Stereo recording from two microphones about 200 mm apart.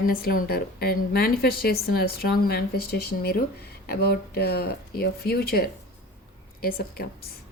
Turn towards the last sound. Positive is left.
turn(degrees=50)  # may be behind; listen again after turning